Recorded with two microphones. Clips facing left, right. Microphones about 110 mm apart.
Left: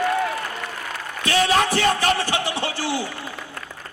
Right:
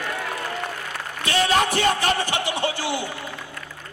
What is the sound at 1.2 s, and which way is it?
A man's voice, 20° right (ahead or behind).